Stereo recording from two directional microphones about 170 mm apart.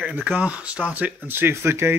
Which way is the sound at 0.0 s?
5° right (ahead or behind).